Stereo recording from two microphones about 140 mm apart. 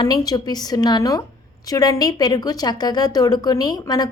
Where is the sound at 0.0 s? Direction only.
30° left (ahead or behind).